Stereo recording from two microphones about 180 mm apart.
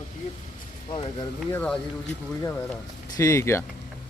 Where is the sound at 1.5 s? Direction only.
5° left (ahead or behind).